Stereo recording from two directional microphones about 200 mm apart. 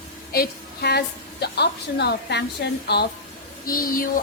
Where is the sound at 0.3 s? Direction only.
55° left (ahead or behind).